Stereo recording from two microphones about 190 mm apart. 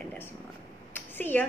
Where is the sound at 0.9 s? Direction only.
10° left (ahead or behind).